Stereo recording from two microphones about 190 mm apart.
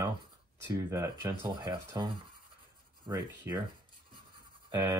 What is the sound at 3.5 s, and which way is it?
Speech, 15° right (ahead or behind).